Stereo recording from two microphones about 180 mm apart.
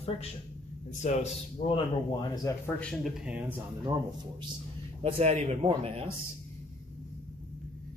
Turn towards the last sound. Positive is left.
turn(degrees=-35)  # may be behind; listen again after turning